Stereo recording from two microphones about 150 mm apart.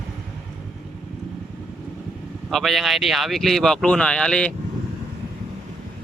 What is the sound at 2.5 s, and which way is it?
Speech, centre (ahead or behind).